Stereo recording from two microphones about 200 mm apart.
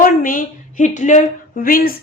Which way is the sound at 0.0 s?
45° left (ahead or behind).